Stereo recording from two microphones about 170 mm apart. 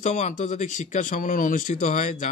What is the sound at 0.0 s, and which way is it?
Speech, 45° left (ahead or behind).